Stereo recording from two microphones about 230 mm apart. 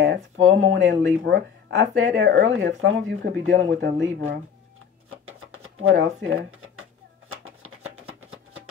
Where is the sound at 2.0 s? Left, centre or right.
Right.